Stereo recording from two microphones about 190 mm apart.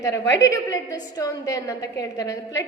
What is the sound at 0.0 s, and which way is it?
A woman's voice, 15° left (ahead or behind).